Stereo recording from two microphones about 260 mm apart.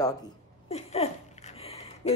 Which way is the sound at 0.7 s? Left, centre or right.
Left.